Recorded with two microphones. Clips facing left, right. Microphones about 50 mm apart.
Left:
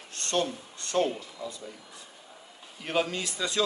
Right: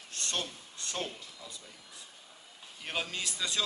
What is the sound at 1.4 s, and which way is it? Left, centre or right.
Speech, left.